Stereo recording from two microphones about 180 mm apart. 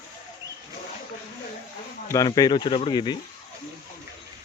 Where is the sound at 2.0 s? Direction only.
20° left (ahead or behind).